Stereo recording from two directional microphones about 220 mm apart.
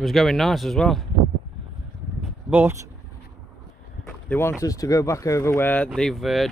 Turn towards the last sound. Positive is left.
turn(degrees=0)  # may be behind; listen again after turning